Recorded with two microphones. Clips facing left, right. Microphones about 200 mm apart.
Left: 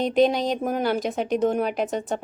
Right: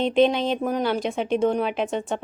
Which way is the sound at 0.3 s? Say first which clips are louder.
Even; 40° left (ahead or behind).